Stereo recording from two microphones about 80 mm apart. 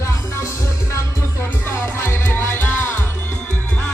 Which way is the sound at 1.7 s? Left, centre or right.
Left.